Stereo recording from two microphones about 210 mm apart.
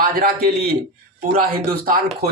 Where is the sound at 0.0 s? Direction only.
45° right (ahead or behind).